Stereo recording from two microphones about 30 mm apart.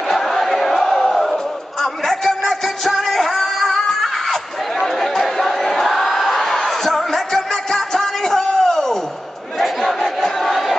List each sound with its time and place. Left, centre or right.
0.1 s a sound: centre
0.9 s music: centre
1.2 s music: centre
4.8 s battle cry: centre
7.0 s music: centre
9.6 s crowd: centre
9.9 s crowd: centre
10.4 s crowd: centre